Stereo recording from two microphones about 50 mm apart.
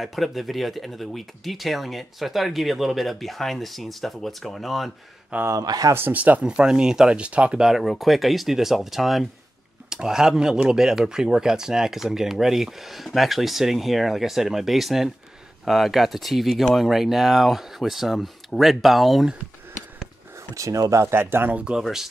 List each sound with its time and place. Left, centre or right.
0.0 s speech: centre
5.3 s speech: right
6.4 s speech: centre
7.6 s speech: centre
20.5 s speech: right
21.1 s speech: right
21.8 s speech: centre